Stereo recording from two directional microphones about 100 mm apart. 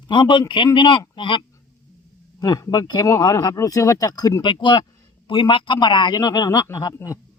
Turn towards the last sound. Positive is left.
turn(degrees=30)  # may be behind; listen again after turning